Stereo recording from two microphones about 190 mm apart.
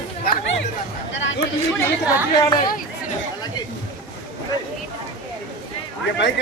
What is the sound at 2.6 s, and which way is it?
Speech, 50° left (ahead or behind).